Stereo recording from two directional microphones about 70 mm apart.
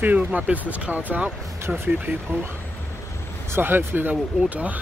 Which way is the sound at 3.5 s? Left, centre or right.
Right.